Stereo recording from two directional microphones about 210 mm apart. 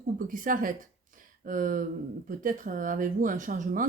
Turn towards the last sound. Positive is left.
turn(degrees=-40)  # may be behind; listen again after turning